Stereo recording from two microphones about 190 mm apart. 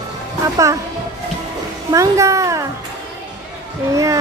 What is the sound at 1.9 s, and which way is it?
Speech, 15° right (ahead or behind).